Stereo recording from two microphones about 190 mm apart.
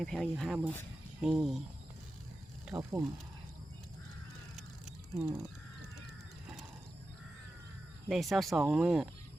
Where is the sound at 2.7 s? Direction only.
10° right (ahead or behind).